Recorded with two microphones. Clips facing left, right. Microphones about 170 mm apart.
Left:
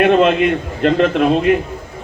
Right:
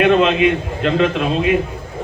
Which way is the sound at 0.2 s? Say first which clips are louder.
Left 1 dB; 55° left (ahead or behind).